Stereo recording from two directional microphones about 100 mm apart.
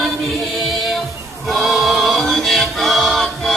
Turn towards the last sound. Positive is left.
turn(degrees=0)  # may be behind; listen again after turning